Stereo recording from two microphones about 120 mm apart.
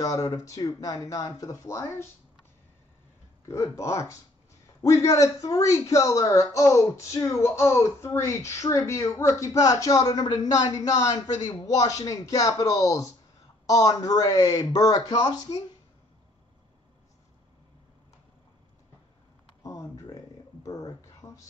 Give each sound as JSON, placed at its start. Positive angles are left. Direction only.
{"t": 0.0, "sound": "speech", "side_deg": 30}
{"t": 3.4, "sound": "speech", "side_deg": 25}
{"t": 19.6, "sound": "a sound", "side_deg": 30}